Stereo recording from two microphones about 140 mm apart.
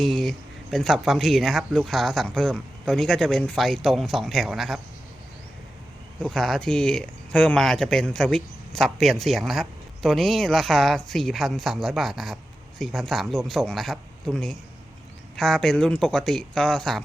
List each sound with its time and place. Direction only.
0.0 s speech: centre (ahead or behind)
6.2 s speech: 5° left (ahead or behind)